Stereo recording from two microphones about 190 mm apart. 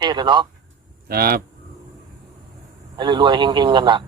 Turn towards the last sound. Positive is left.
turn(degrees=-25)  # may be behind; listen again after turning